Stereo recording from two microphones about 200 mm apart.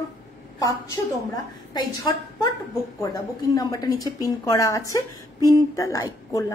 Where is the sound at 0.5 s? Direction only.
20° left (ahead or behind).